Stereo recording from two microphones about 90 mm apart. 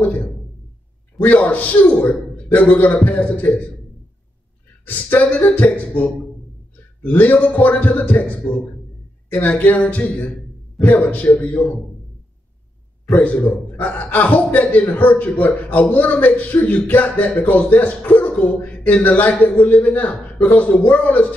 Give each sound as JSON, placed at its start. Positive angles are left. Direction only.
{"t": 1.2, "sound": "a man's voice", "side_deg": 20}
{"t": 4.8, "sound": "a man's voice", "side_deg": 20}
{"t": 13.1, "sound": "a man's voice", "side_deg": 15}